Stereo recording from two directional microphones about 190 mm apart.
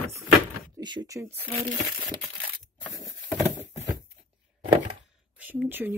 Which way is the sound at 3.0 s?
10° right (ahead or behind).